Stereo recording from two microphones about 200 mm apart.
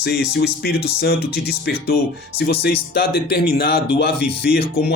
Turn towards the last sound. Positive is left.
turn(degrees=50)  # may be behind; listen again after turning